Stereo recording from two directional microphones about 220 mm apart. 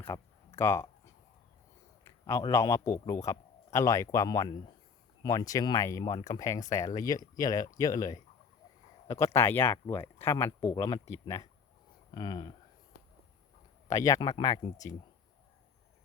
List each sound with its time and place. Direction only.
0.0 s a sound: 10° left (ahead or behind)
2.0 s a man's voice: 15° left (ahead or behind)
13.8 s speech: 15° left (ahead or behind)